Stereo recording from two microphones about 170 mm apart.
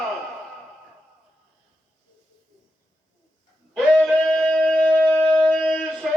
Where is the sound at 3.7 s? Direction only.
Centre (ahead or behind).